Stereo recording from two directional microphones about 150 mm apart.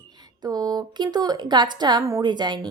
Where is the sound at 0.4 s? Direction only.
25° right (ahead or behind).